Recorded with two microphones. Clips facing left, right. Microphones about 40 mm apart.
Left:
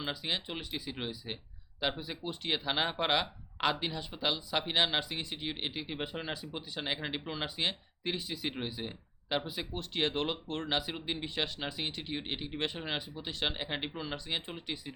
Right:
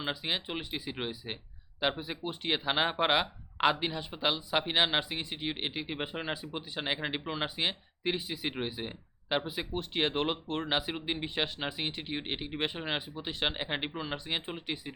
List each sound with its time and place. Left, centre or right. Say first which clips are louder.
0.0 s speech: right 2 dB; centre